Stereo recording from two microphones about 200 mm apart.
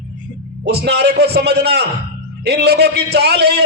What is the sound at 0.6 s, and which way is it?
A man's voice, 55° right (ahead or behind).